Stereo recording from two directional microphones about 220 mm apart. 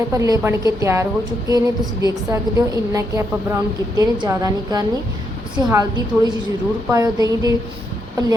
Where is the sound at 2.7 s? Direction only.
15° right (ahead or behind).